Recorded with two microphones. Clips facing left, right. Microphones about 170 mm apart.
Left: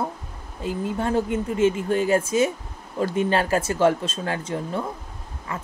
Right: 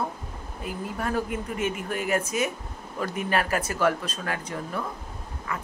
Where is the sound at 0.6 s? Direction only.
25° left (ahead or behind).